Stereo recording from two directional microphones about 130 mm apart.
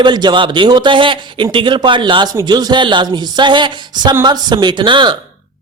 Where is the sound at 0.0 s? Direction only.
35° right (ahead or behind).